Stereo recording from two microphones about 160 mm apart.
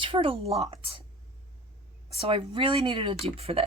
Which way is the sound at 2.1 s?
35° right (ahead or behind).